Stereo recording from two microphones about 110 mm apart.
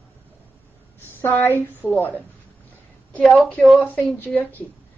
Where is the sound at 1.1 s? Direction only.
20° left (ahead or behind).